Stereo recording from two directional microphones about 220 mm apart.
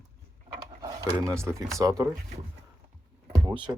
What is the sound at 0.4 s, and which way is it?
Speech, 20° right (ahead or behind).